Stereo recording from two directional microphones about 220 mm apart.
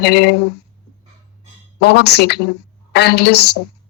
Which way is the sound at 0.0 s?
50° left (ahead or behind).